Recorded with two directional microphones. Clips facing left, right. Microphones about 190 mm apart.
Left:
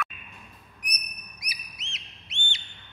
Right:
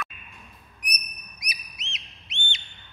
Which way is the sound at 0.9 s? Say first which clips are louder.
Right 1 dB; 20° right (ahead or behind).